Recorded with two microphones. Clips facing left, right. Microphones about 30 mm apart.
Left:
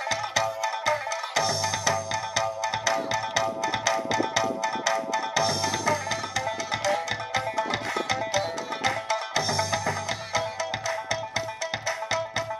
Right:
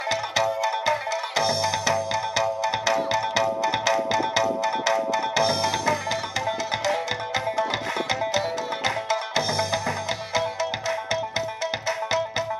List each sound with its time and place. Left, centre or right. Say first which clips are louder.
0.1 s music: right 4 dB; right
8.1 s music: right 3 dB; right